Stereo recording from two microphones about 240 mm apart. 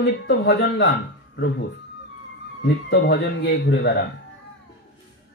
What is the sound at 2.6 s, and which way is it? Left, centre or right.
Speech, left.